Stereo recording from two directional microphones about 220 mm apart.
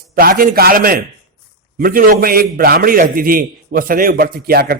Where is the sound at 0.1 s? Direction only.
40° right (ahead or behind).